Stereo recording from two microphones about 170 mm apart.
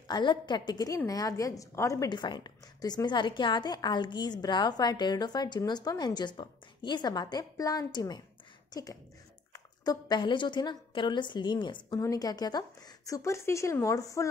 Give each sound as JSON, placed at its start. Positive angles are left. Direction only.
{"t": 0.1, "sound": "a woman's voice", "side_deg": 25}
{"t": 9.5, "sound": "a woman's voice", "side_deg": 25}